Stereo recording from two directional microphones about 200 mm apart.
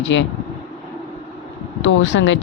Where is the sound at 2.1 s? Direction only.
65° left (ahead or behind).